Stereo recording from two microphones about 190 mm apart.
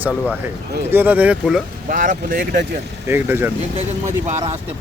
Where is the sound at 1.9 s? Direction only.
45° right (ahead or behind).